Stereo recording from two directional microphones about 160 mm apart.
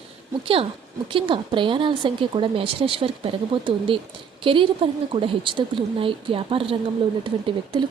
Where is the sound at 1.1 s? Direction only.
30° right (ahead or behind).